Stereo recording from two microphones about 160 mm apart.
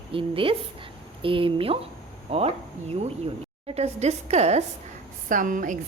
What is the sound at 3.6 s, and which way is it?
A woman's voice, 40° right (ahead or behind).